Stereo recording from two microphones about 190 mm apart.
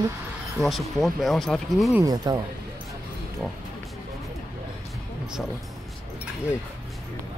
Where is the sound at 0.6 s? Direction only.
Centre (ahead or behind).